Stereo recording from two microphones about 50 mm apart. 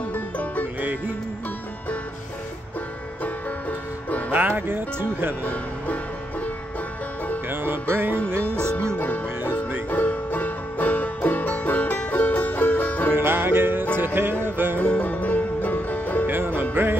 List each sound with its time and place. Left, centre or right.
0.1 s music: left
0.7 s music: right
4.3 s speech: right
5.4 s speech: left
7.4 s music: right
9.8 s music: left
13.1 s music: right
15.0 s music: left
16.3 s music: right